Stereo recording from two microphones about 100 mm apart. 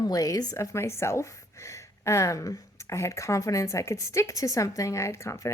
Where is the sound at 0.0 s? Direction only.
40° left (ahead or behind).